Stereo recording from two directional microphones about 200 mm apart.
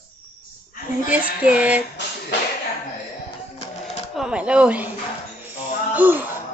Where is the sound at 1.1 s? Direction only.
5° right (ahead or behind).